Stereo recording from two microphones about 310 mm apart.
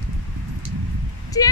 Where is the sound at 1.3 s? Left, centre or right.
Centre.